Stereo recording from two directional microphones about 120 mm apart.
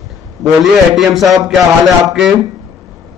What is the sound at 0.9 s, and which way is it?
A man's voice, centre (ahead or behind).